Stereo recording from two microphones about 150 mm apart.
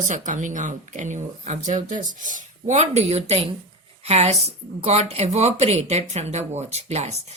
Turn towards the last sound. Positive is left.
turn(degrees=-50)  # may be behind; listen again after turning